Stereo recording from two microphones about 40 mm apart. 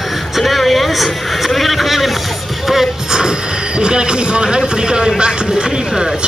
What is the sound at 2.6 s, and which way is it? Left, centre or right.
Music, centre.